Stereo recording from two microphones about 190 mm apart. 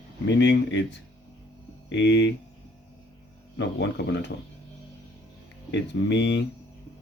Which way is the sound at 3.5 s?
65° left (ahead or behind).